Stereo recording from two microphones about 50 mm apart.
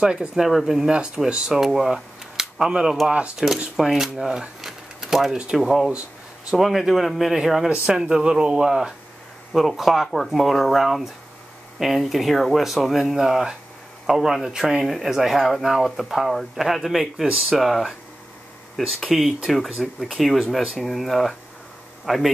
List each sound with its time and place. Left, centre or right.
0.0 s speech: centre
0.5 s speech: centre
3.4 s speech: centre